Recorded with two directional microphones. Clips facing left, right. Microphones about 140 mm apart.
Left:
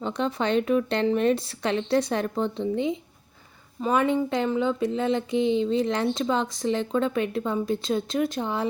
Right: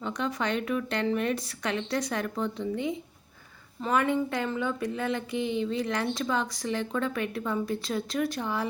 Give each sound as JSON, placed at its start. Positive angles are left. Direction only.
{"t": 0.0, "sound": "speech", "side_deg": 30}